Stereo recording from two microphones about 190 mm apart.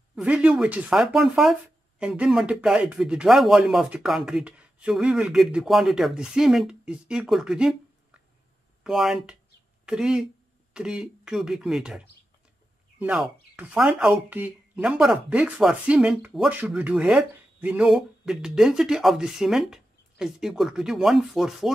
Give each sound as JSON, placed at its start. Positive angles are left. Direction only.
{"t": 0.1, "sound": "speech", "side_deg": -5}